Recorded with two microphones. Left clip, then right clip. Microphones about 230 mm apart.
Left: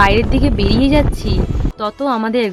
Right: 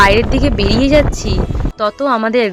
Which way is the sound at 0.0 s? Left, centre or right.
Centre.